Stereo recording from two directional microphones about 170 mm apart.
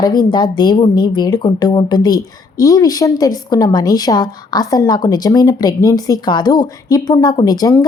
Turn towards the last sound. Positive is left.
turn(degrees=25)  # may be behind; listen again after turning